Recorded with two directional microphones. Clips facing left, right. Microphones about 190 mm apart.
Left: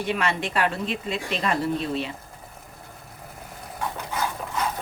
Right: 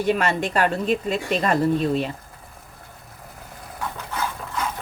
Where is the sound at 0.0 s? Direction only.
40° right (ahead or behind).